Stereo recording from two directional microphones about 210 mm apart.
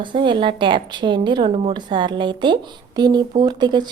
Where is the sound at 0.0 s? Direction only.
20° right (ahead or behind).